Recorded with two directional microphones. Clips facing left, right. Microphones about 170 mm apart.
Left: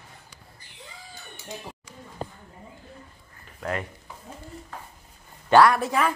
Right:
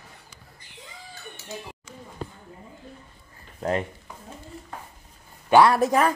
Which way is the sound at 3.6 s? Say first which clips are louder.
Right 5 dB; 30° right (ahead or behind).